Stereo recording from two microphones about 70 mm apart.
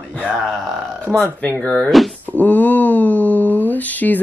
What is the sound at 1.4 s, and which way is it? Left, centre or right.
Speech, centre.